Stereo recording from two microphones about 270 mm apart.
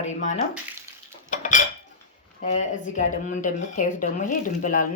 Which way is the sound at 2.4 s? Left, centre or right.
Left.